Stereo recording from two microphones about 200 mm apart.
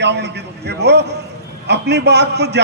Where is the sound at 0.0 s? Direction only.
60° right (ahead or behind).